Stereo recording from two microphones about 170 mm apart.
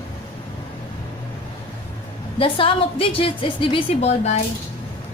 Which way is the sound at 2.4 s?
30° left (ahead or behind).